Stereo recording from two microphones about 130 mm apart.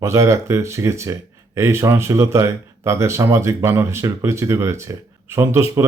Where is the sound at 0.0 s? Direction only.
20° right (ahead or behind).